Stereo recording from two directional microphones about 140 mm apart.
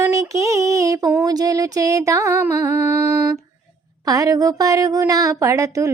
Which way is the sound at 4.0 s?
25° right (ahead or behind).